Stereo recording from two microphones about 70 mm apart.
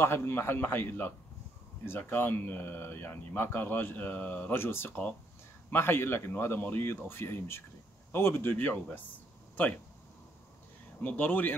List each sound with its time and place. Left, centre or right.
0.0 s speech: left
11.0 s speech: left